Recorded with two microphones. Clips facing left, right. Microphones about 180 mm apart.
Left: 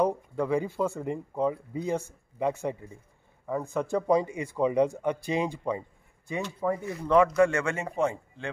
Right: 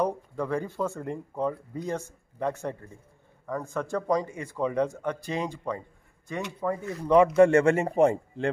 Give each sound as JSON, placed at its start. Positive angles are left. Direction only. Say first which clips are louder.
{"t": 0.0, "sound": "speech", "louder": "left 2 dB", "side_deg": 10}
{"t": 7.1, "sound": "speech", "louder": "right 3 dB", "side_deg": -20}